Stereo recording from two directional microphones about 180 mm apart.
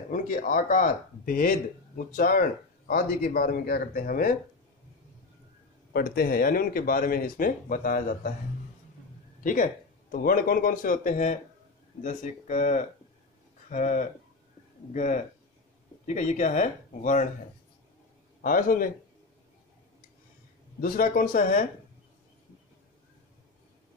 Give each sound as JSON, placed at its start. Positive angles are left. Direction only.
{"t": 0.1, "sound": "speech", "side_deg": 50}
{"t": 5.9, "sound": "speech", "side_deg": 55}
{"t": 9.4, "sound": "speech", "side_deg": 50}
{"t": 18.4, "sound": "speech", "side_deg": 50}
{"t": 20.8, "sound": "speech", "side_deg": 55}